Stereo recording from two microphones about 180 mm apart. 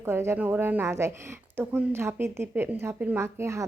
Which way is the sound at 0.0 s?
15° right (ahead or behind).